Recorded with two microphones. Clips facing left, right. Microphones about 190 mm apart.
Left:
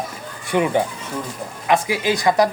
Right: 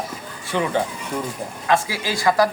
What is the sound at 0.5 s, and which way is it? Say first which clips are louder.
Speech: left 3 dB; 15° left (ahead or behind).